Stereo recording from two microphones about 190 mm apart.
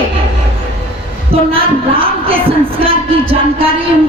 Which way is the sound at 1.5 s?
30° right (ahead or behind).